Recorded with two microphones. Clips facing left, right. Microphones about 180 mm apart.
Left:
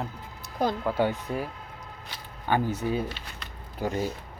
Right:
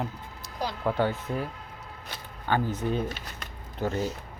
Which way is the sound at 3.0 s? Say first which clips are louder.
Right 2 dB; 45° right (ahead or behind).